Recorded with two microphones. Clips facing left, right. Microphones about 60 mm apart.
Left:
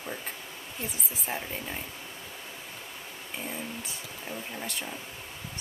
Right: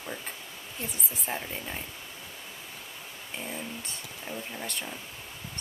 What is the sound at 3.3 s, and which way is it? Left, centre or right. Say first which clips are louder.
Speech: even; centre.